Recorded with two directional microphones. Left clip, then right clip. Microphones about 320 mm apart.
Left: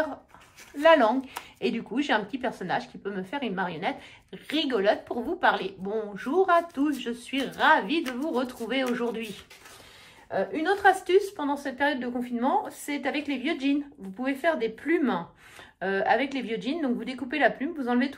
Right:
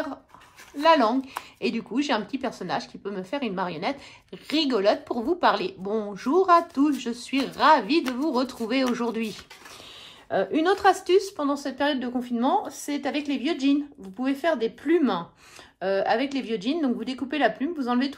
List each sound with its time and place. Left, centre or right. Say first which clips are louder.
0.7 s speech: even; centre
10.3 s speech: right 4 dB; centre